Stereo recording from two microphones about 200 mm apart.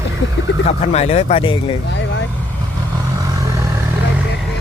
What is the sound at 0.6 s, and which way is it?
Speech, 35° left (ahead or behind).